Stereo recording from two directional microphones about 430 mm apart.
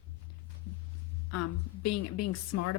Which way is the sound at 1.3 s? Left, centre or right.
Left.